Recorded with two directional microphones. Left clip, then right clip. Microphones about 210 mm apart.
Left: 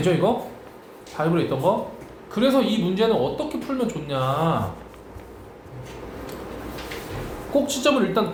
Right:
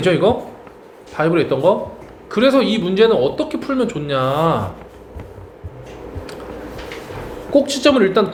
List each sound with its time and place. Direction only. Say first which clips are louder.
0.0 s speech: right 6 dB; 35° right (ahead or behind)
7.5 s speech: right 7 dB; 35° right (ahead or behind)